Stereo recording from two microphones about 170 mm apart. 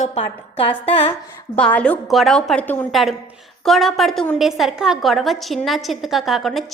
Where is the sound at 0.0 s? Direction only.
40° left (ahead or behind).